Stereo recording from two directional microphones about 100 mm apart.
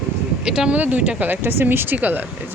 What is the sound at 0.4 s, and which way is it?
Speech, 10° right (ahead or behind).